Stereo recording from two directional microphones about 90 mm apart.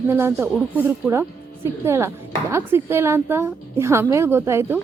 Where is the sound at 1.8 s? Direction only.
30° right (ahead or behind).